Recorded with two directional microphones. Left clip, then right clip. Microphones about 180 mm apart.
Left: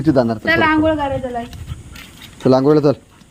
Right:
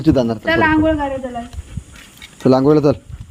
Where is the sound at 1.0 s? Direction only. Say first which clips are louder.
Left 1 dB; 40° left (ahead or behind).